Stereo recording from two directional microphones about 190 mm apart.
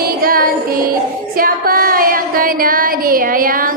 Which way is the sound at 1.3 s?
50° right (ahead or behind).